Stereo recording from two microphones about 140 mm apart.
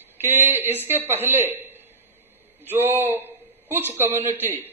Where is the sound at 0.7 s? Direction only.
15° right (ahead or behind).